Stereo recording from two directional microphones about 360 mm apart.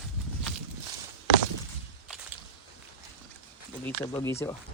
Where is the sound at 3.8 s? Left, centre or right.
Centre.